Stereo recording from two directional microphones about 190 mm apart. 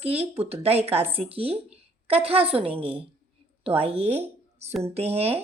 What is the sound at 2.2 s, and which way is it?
Speech, 30° right (ahead or behind).